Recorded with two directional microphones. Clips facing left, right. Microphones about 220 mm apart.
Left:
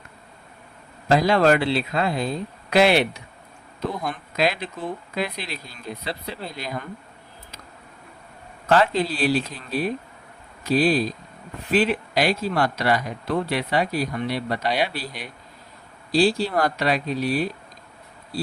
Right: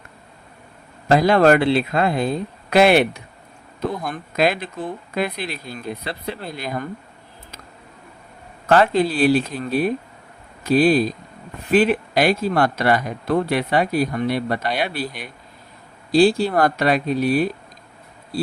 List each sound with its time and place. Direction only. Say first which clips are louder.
1.0 s speech: right 3 dB; 55° right (ahead or behind)
4.4 s speech: right 4 dB; 50° right (ahead or behind)
8.7 s speech: right 4 dB; 55° right (ahead or behind)